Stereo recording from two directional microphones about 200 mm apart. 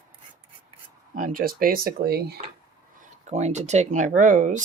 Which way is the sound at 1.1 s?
45° right (ahead or behind).